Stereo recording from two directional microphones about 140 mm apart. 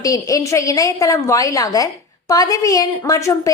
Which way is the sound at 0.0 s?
25° left (ahead or behind).